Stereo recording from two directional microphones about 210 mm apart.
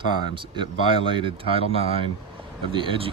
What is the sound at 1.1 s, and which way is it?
Speech, 25° right (ahead or behind).